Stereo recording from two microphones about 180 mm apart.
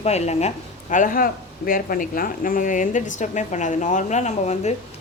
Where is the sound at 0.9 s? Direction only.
50° left (ahead or behind).